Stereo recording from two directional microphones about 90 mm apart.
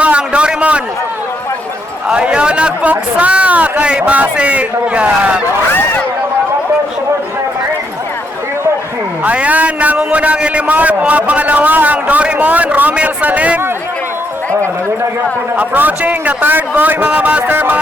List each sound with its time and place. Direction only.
0.0 s a sound: 15° right (ahead or behind)
2.0 s a man's voice: 10° right (ahead or behind)
5.7 s speech: 20° left (ahead or behind)
9.2 s a man's voice: 15° right (ahead or behind)
15.5 s a man's voice: 20° right (ahead or behind)